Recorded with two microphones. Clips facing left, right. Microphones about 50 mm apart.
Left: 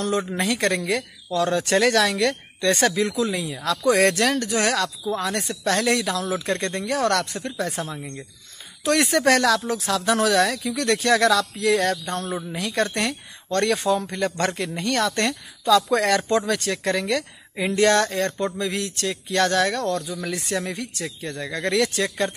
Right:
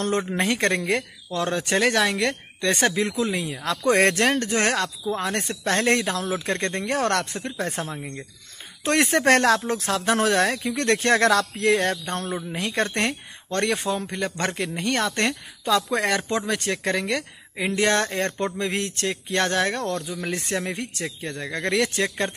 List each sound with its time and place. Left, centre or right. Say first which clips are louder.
0.4 s speech: even; right
11.7 s speech: left 2 dB; right